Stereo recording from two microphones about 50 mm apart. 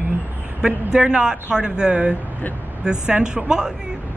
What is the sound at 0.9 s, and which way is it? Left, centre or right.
Speech, centre.